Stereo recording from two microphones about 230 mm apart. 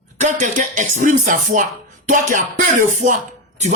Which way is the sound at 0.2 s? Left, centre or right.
Right.